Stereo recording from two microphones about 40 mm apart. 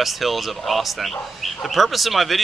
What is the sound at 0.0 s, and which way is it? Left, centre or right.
Speech, centre.